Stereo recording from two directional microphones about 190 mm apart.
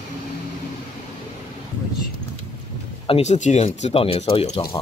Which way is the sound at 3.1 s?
35° left (ahead or behind).